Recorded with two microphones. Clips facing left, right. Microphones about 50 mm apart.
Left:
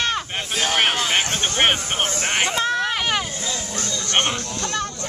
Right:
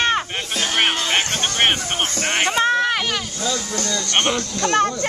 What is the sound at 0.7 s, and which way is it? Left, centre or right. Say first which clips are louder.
Music: right 1 dB; centre.